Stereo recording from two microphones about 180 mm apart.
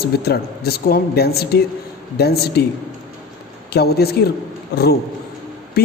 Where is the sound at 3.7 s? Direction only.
60° left (ahead or behind).